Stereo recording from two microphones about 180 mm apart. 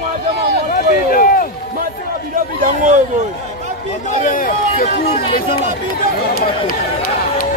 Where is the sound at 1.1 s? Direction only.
50° left (ahead or behind).